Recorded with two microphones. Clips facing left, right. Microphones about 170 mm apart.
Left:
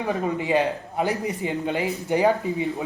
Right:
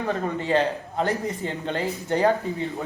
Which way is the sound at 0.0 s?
15° left (ahead or behind).